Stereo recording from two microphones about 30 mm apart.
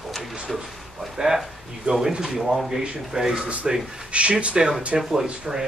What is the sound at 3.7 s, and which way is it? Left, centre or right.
Speech, right.